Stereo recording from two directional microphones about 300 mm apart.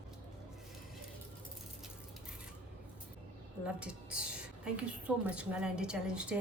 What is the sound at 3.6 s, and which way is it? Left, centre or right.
A woman's voice, centre.